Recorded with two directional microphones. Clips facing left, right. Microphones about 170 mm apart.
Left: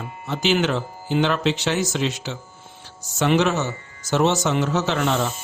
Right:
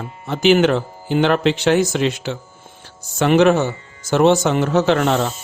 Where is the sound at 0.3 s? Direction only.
50° right (ahead or behind).